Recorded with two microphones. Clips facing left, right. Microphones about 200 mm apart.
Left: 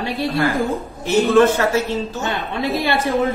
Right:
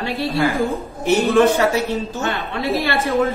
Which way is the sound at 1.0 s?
15° right (ahead or behind).